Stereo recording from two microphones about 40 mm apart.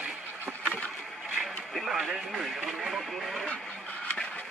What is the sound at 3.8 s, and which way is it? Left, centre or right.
Vehicle, left.